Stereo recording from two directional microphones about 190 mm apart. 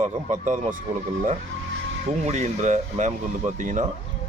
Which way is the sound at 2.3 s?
40° right (ahead or behind).